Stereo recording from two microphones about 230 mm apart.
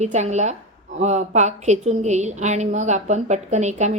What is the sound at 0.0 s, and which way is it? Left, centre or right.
A woman's voice, right.